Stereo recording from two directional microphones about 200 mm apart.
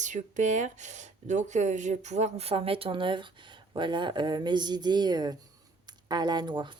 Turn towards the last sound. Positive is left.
turn(degrees=-20)  # may be behind; listen again after turning